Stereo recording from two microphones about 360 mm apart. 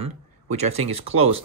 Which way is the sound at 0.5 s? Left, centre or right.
Centre.